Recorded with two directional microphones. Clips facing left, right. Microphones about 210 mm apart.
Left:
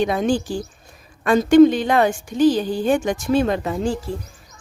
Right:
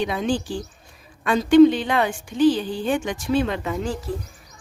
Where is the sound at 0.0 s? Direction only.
45° left (ahead or behind).